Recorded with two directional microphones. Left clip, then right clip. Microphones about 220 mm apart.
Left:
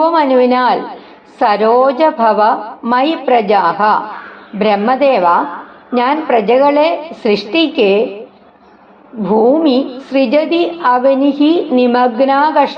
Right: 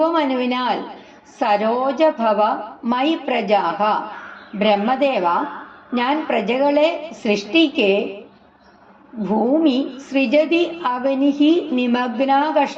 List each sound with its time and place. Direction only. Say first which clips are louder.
0.0 s a woman's voice: left 8 dB; 20° left (ahead or behind)
9.2 s a woman's voice: left 7 dB; 20° left (ahead or behind)